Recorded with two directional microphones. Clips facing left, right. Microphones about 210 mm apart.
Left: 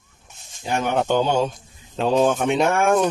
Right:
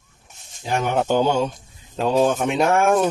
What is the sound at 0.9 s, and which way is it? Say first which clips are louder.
Speech: right 1 dB; 5° right (ahead or behind).